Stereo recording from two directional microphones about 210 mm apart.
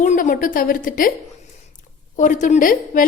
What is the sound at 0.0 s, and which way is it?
A woman's voice, 35° left (ahead or behind).